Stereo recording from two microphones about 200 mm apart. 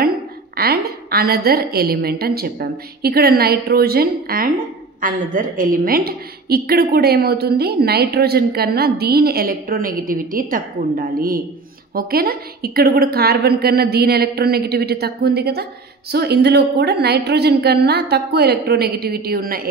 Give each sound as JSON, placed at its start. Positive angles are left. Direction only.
{"t": 0.6, "sound": "a woman's voice", "side_deg": -50}